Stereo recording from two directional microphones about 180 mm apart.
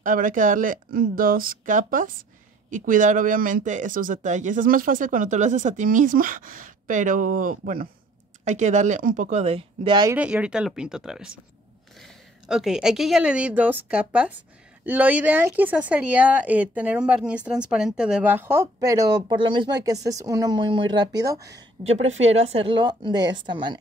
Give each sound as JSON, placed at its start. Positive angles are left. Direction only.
{"t": 0.0, "sound": "speech", "side_deg": -50}
{"t": 10.1, "sound": "a woman's voice", "side_deg": -5}
{"t": 21.9, "sound": "a woman's voice", "side_deg": -40}